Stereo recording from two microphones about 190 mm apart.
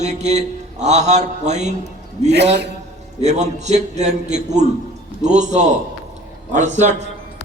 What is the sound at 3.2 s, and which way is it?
A man's voice, 35° right (ahead or behind).